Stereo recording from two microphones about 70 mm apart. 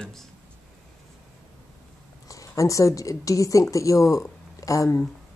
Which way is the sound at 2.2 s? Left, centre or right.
Left.